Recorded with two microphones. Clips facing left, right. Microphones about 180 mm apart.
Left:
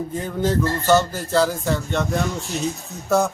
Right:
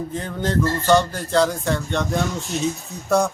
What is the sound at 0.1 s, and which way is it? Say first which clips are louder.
Speech: left 3 dB; 5° left (ahead or behind).